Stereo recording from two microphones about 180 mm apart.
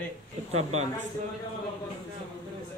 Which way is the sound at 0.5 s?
35° right (ahead or behind).